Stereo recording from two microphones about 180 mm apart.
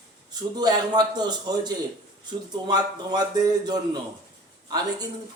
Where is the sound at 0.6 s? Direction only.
25° right (ahead or behind).